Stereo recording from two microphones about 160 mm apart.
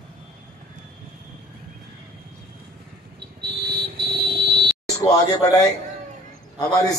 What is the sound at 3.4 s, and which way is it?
Vehicle, 90° right.